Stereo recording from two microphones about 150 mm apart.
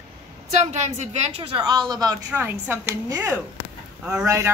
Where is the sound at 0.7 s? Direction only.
50° right (ahead or behind).